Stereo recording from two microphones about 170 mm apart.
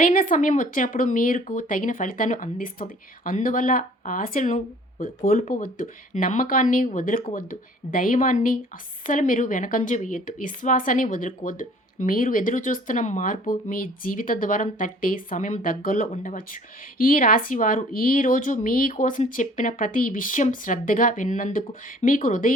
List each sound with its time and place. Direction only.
0.0 s speech: 55° left (ahead or behind)